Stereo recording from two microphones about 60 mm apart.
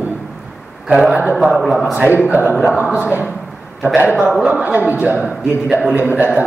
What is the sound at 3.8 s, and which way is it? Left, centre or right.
A man's voice, right.